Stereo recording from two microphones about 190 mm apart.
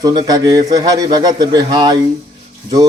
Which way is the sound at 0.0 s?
20° right (ahead or behind).